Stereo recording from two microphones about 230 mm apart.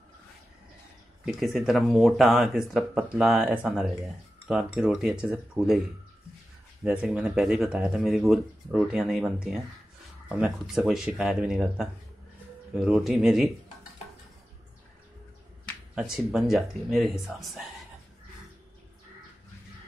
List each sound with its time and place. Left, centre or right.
1.2 s speech: centre
6.8 s speech: centre
15.9 s speech: centre